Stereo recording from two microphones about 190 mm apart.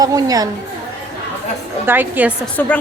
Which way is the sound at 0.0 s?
20° right (ahead or behind).